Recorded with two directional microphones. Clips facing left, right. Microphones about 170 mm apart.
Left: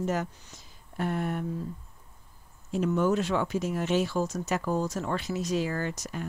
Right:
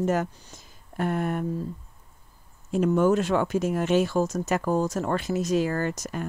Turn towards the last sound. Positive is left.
turn(degrees=-50)  # may be behind; listen again after turning